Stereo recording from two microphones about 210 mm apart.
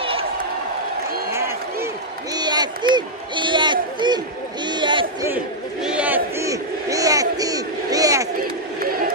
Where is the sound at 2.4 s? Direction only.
20° right (ahead or behind).